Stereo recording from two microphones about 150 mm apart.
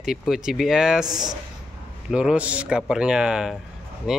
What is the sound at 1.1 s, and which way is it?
Speech, 25° right (ahead or behind).